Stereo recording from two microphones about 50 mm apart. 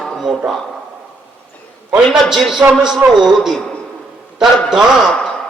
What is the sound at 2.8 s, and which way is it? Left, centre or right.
Speech, centre.